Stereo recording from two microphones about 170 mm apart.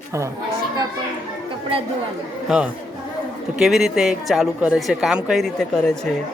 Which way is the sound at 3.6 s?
Centre (ahead or behind).